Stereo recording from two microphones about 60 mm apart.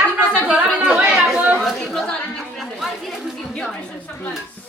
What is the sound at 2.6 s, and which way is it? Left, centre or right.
Chatter, centre.